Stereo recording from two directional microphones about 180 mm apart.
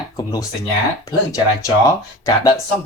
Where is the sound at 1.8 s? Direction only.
20° left (ahead or behind).